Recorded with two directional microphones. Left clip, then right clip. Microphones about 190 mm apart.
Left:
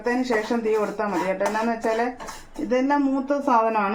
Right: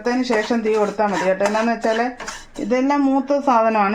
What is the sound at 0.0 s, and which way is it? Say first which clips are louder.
Speech: right 4 dB; 50° right (ahead or behind).